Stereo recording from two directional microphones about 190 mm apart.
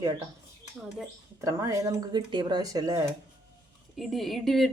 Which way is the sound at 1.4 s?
15° right (ahead or behind).